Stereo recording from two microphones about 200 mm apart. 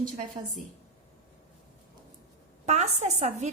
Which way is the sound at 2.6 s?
35° right (ahead or behind).